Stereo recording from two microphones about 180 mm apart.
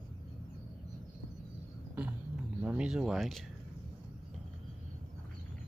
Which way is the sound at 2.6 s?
5° right (ahead or behind).